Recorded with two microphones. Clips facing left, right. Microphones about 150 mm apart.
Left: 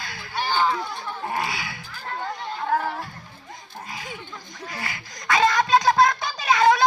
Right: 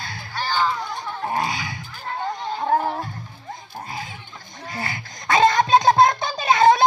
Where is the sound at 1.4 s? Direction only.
20° right (ahead or behind).